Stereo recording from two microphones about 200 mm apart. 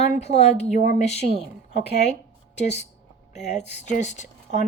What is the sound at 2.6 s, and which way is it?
Speech, 35° left (ahead or behind).